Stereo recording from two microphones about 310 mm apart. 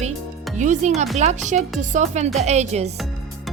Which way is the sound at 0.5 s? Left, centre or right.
Right.